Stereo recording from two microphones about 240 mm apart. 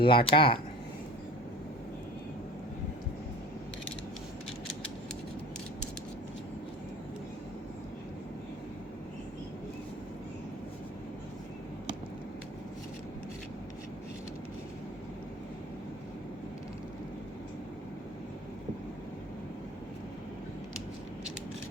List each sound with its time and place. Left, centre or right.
0.0 s speech: left